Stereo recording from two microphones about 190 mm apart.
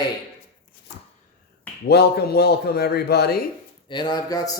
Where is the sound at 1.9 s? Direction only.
60° left (ahead or behind).